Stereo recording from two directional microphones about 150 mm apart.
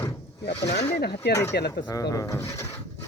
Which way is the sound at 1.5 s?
90° left.